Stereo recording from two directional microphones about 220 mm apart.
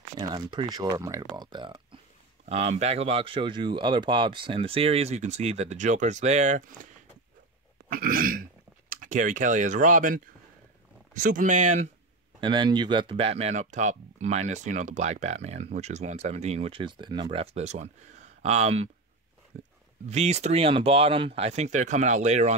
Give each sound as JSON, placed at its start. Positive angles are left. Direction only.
{"t": 0.2, "sound": "speech", "side_deg": -20}
{"t": 7.9, "sound": "speech", "side_deg": -40}
{"t": 12.4, "sound": "speech", "side_deg": -20}